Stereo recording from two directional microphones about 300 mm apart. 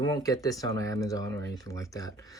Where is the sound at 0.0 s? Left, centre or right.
Centre.